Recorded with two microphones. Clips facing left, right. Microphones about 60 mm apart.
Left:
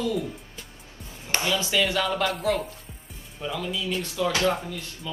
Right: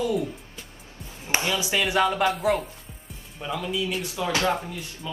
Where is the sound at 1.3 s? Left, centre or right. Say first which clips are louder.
Right 1 dB; centre.